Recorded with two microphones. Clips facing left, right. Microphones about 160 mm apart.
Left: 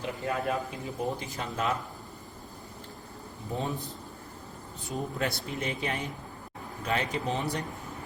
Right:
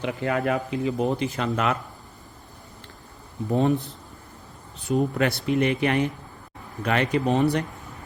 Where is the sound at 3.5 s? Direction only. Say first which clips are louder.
Right 12 dB; 70° right (ahead or behind).